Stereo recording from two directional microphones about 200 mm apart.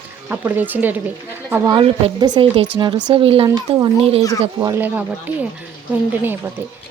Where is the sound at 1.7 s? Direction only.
25° right (ahead or behind).